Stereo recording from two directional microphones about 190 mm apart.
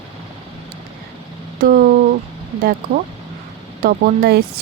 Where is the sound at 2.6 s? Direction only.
50° right (ahead or behind).